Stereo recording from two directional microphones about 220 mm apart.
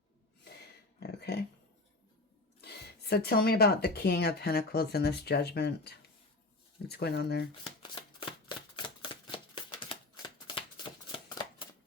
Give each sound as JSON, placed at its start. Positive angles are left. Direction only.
{"t": 0.9, "sound": "a sound", "side_deg": 50}
{"t": 2.6, "sound": "speech", "side_deg": 50}
{"t": 7.8, "sound": "shuffling cards", "side_deg": 20}